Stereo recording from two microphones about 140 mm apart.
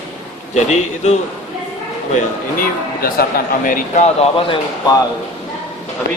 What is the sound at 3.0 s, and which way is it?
A man's voice, 90° left.